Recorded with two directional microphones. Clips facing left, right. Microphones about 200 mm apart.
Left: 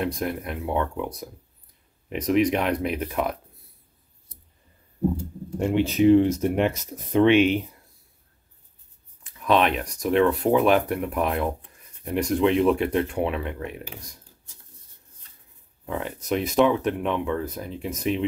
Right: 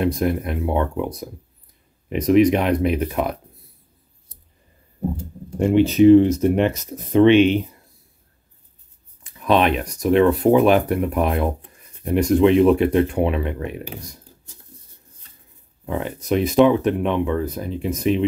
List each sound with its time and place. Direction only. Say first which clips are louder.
0.0 s speech: right 7 dB; 5° right (ahead or behind)
2.0 s speech: right 6 dB; centre (ahead or behind)
5.8 s speech: right 6 dB; 5° left (ahead or behind)
9.4 s speech: right 3 dB; centre (ahead or behind)
15.9 s speech: right 5 dB; centre (ahead or behind)